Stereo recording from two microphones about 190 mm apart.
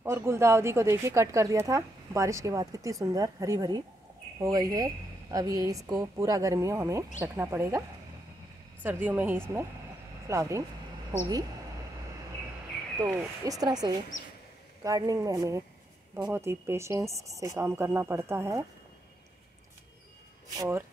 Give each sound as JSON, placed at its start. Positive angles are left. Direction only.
{"t": 0.0, "sound": "a woman's voice", "side_deg": -15}
{"t": 8.8, "sound": "a woman's voice", "side_deg": -10}
{"t": 13.0, "sound": "a woman's voice", "side_deg": -15}
{"t": 20.4, "sound": "a woman's voice", "side_deg": -15}